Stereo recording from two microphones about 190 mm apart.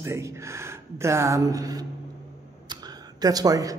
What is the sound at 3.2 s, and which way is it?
Speech, 20° right (ahead or behind).